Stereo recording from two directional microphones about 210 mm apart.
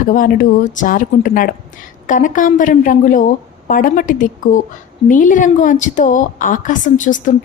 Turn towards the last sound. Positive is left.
turn(degrees=35)  # may be behind; listen again after turning